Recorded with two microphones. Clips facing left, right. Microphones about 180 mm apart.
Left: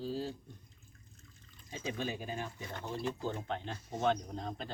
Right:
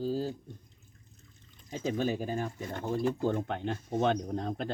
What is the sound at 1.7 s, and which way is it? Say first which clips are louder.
Speech: right 8 dB; 40° right (ahead or behind).